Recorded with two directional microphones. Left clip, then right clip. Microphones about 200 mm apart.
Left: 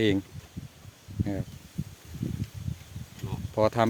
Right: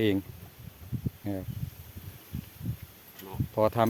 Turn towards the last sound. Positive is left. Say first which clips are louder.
# left 1 dB
turn(degrees=10)  # may be behind; listen again after turning